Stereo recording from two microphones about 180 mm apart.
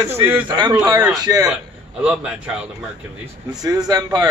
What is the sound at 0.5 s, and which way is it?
Speech, 25° right (ahead or behind).